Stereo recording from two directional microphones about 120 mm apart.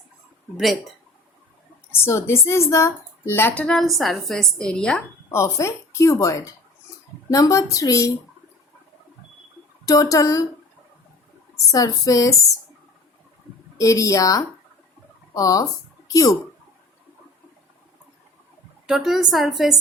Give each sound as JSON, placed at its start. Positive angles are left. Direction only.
{"t": 0.5, "sound": "a woman's voice", "side_deg": 0}
{"t": 2.0, "sound": "speech", "side_deg": 20}
{"t": 5.3, "sound": "a woman's voice", "side_deg": 25}
{"t": 9.8, "sound": "a woman's voice", "side_deg": 30}
{"t": 11.7, "sound": "a woman's voice", "side_deg": 30}
{"t": 13.7, "sound": "a woman's voice", "side_deg": 25}
{"t": 18.9, "sound": "a woman's voice", "side_deg": -5}